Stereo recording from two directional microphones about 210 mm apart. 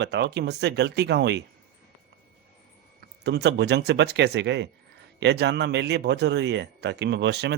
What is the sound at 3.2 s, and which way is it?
A man's voice, 55° right (ahead or behind).